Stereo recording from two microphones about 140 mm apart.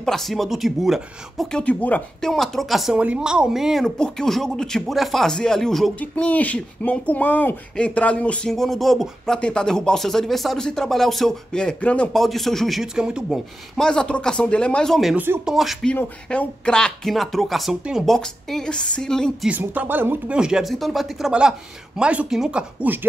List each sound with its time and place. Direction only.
0.0 s speech: centre (ahead or behind)
15.1 s speech: 15° right (ahead or behind)
15.4 s speech: centre (ahead or behind)
19.5 s speech: 10° right (ahead or behind)